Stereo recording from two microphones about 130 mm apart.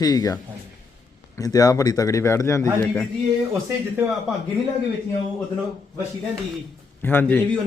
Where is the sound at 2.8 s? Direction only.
10° left (ahead or behind).